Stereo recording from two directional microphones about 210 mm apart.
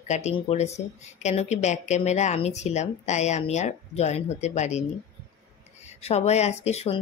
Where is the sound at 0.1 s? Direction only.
35° left (ahead or behind).